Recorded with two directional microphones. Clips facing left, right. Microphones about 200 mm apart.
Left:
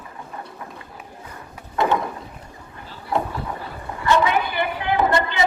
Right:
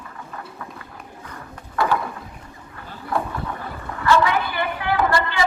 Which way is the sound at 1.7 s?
20° left (ahead or behind).